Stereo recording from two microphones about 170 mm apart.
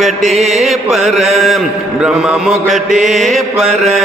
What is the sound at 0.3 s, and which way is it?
Mantra, 40° right (ahead or behind).